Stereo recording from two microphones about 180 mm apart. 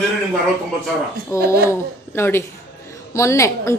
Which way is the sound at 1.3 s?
15° left (ahead or behind).